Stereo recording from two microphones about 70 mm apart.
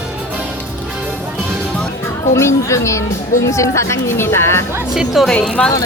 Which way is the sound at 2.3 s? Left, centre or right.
Left.